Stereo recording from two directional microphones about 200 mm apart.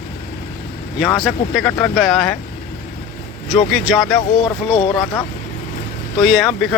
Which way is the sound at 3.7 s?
Centre (ahead or behind).